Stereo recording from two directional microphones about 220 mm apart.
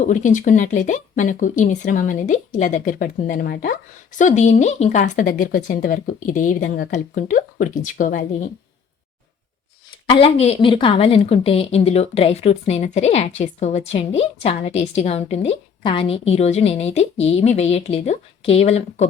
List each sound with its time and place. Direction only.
0.0 s speech: 35° left (ahead or behind)
10.1 s a woman's voice: 25° left (ahead or behind)